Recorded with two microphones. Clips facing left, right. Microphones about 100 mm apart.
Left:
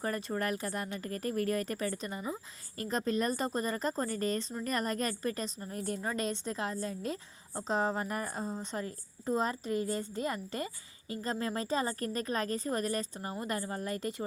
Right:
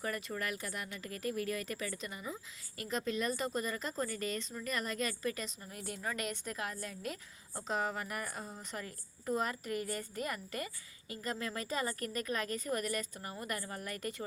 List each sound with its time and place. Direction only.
0.0 s a woman's voice: 35° left (ahead or behind)